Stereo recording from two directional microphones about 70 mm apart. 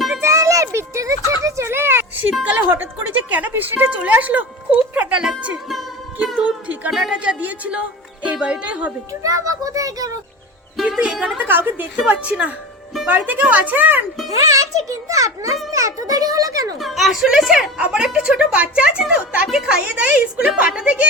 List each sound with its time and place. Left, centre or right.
0.2 s a sound: right
2.4 s a woman's voice: right
6.4 s a woman's voice: right
6.9 s speech: centre
9.2 s a child's voice: right
10.8 s speech: centre
11.3 s a woman's voice: right
11.9 s a woman's voice: centre
14.3 s a child's voice: right
16.8 s a woman's voice: centre